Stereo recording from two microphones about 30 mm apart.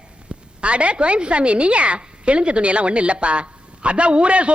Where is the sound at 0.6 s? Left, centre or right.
Right.